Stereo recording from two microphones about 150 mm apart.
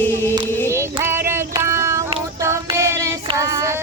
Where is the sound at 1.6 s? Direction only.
20° right (ahead or behind).